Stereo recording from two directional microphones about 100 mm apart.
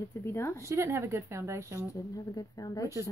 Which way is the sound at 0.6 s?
25° right (ahead or behind).